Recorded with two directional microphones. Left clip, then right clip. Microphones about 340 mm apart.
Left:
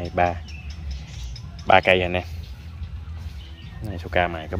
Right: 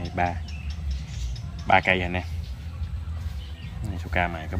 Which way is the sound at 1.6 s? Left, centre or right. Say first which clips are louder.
Left 4 dB; centre.